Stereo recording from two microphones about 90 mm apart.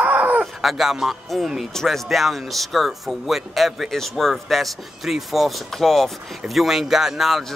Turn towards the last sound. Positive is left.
turn(degrees=-5)  # may be behind; listen again after turning